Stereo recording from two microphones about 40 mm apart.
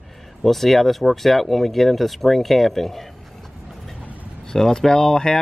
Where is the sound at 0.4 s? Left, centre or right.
Centre.